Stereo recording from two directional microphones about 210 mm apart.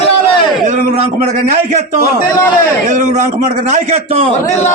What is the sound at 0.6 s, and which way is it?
A man's voice, 35° right (ahead or behind).